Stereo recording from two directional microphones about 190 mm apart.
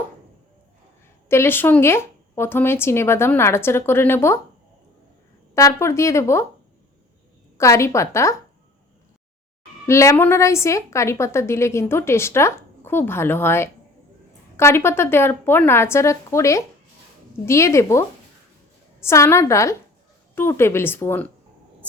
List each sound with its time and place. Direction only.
1.3 s a woman's voice: 10° left (ahead or behind)
5.5 s a woman's voice: 15° left (ahead or behind)
7.6 s a woman's voice: 15° left (ahead or behind)
9.8 s a woman's voice: 15° left (ahead or behind)